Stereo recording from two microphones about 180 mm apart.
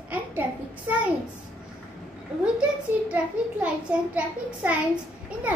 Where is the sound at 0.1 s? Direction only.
10° right (ahead or behind).